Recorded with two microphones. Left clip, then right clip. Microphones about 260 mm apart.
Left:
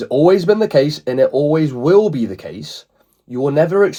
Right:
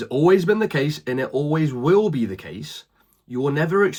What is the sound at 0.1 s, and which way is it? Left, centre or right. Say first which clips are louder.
Speech: left 5 dB; left.